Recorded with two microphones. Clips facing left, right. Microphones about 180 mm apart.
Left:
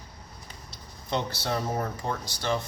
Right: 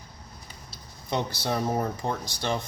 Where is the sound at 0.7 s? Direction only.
10° right (ahead or behind).